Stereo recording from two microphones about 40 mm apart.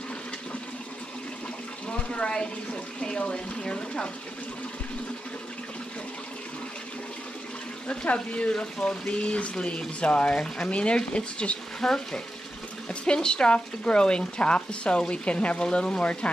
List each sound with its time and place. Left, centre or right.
1.9 s speech: left
7.9 s speech: left
11.8 s speech: centre